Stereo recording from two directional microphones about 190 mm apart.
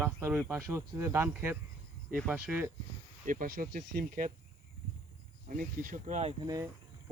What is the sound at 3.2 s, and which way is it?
Speech, 45° right (ahead or behind).